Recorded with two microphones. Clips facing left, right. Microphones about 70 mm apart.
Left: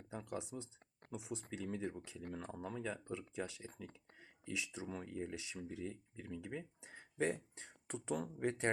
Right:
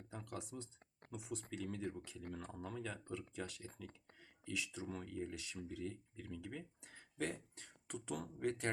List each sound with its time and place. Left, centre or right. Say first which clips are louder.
0.3 s speech: left 3 dB; centre